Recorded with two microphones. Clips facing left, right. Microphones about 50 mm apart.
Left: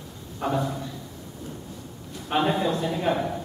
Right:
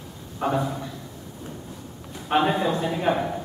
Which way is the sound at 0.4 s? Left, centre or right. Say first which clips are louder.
Right 2 dB; centre.